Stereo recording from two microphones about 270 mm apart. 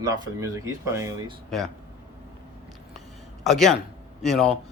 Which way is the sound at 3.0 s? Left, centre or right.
Centre.